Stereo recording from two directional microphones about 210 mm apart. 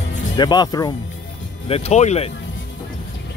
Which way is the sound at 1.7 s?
30° left (ahead or behind).